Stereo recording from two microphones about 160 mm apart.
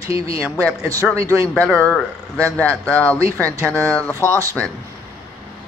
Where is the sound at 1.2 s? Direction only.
20° right (ahead or behind).